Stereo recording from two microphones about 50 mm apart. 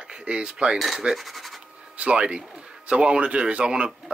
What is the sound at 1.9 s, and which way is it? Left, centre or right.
Speech, right.